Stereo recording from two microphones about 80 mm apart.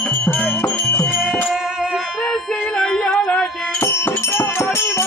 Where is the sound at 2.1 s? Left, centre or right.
Centre.